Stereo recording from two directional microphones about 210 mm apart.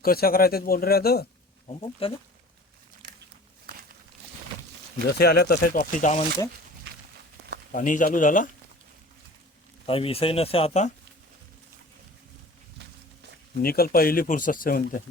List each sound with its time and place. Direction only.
0.0 s speech: 45° left (ahead or behind)
1.6 s speech: 25° left (ahead or behind)
5.0 s speech: 50° left (ahead or behind)
7.7 s speech: 40° left (ahead or behind)
9.8 s speech: 25° left (ahead or behind)
13.6 s speech: 45° left (ahead or behind)